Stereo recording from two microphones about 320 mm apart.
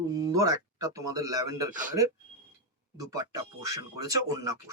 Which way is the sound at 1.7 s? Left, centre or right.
Right.